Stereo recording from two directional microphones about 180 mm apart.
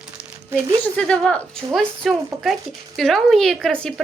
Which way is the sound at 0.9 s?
5° left (ahead or behind).